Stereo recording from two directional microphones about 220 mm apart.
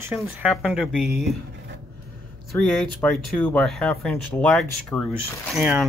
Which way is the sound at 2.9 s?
5° left (ahead or behind).